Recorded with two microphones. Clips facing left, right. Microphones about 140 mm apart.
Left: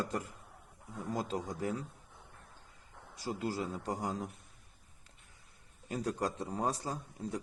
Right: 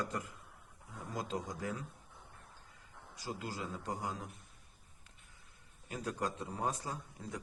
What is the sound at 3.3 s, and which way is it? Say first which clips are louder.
A man's voice: left 5 dB; 30° left (ahead or behind).